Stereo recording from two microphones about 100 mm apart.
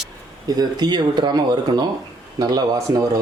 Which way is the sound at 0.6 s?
45° right (ahead or behind).